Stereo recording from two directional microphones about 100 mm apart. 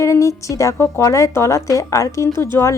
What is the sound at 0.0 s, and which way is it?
Speech, 30° left (ahead or behind).